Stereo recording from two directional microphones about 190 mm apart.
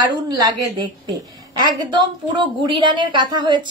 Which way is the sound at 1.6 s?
20° right (ahead or behind).